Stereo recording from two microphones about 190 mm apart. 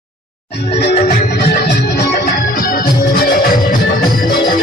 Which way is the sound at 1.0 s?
50° left (ahead or behind).